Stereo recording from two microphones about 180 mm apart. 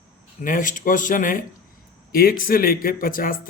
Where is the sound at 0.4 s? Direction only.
50° left (ahead or behind).